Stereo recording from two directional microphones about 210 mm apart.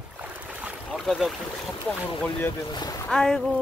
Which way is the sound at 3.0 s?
5° left (ahead or behind).